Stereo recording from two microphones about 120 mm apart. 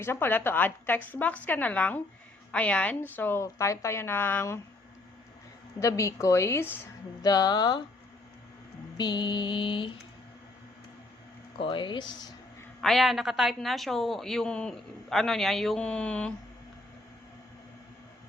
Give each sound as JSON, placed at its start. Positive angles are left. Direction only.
{"t": 0.0, "sound": "a woman's voice", "side_deg": 20}
{"t": 5.8, "sound": "a woman's voice", "side_deg": 25}
{"t": 7.2, "sound": "mantra", "side_deg": 30}
{"t": 9.0, "sound": "mantra", "side_deg": 40}
{"t": 11.6, "sound": "mantra", "side_deg": 45}
{"t": 12.8, "sound": "a woman's voice", "side_deg": 0}